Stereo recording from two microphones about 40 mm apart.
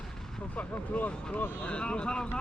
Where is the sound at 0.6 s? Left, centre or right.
Left.